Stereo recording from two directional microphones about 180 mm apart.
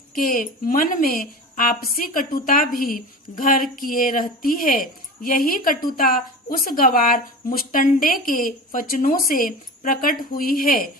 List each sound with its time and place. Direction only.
0.1 s a woman's voice: 50° left (ahead or behind)